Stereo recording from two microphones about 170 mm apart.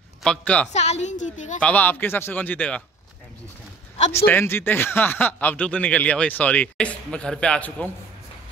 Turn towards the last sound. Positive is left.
turn(degrees=10)  # may be behind; listen again after turning